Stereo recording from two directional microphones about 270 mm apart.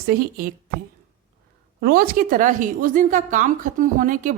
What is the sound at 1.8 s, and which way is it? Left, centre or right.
A woman's voice, right.